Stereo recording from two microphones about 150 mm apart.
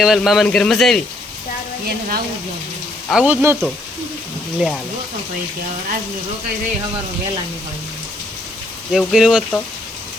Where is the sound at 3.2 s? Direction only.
15° right (ahead or behind).